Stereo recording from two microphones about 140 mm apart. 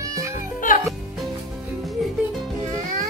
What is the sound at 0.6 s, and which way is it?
Music, 75° left (ahead or behind).